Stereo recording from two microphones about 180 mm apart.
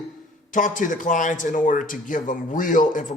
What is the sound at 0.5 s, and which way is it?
A man's voice, 45° left (ahead or behind).